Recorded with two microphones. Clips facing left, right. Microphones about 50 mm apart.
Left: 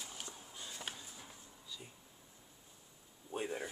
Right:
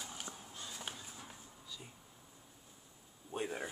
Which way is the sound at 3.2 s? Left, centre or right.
Centre.